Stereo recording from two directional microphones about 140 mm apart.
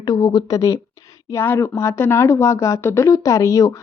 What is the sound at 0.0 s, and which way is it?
Speech, 25° left (ahead or behind).